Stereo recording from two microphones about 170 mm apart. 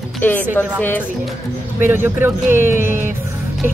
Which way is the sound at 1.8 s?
15° right (ahead or behind).